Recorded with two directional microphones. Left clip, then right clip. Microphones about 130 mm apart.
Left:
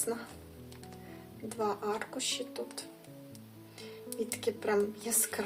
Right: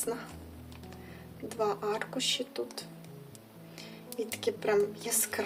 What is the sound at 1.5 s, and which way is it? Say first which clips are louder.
A woman's voice: right 2 dB; 25° right (ahead or behind).